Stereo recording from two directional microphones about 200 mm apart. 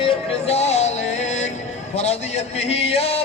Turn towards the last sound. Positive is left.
turn(degrees=30)  # may be behind; listen again after turning